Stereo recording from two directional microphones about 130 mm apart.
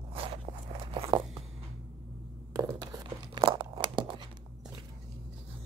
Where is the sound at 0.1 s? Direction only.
45° right (ahead or behind).